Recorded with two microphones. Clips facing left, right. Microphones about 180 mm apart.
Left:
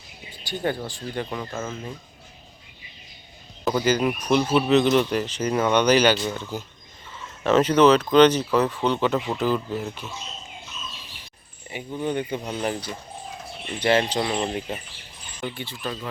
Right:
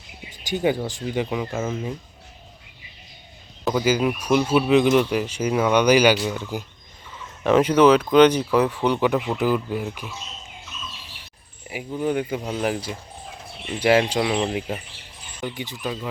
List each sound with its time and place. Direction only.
0.5 s speech: 10° right (ahead or behind)
3.6 s speech: centre (ahead or behind)
10.0 s speech: 25° left (ahead or behind)
11.7 s speech: 5° right (ahead or behind)